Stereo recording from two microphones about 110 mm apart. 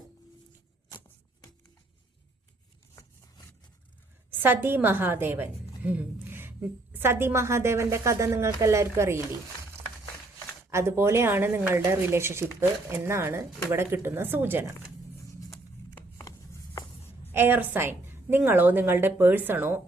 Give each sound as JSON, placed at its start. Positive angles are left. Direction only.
{"t": 4.3, "sound": "a woman's voice", "side_deg": -20}
{"t": 10.7, "sound": "a woman's voice", "side_deg": -25}
{"t": 17.3, "sound": "a woman's voice", "side_deg": -20}